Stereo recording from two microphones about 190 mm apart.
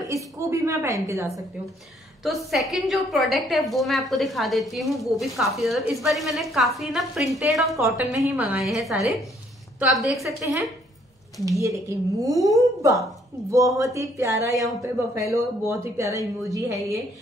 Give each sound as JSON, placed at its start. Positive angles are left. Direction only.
{"t": 0.0, "sound": "speech", "side_deg": -15}
{"t": 2.2, "sound": "a woman's voice", "side_deg": 0}
{"t": 11.4, "sound": "speech", "side_deg": -15}